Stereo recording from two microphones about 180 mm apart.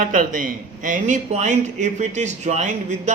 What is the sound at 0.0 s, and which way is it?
A man's voice, 50° right (ahead or behind).